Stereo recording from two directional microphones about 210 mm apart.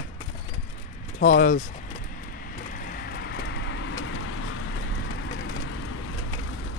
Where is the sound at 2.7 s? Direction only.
45° left (ahead or behind); by 4.0 s 60° left (ahead or behind).